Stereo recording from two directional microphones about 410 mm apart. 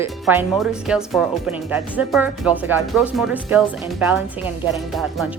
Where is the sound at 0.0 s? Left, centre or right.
Centre.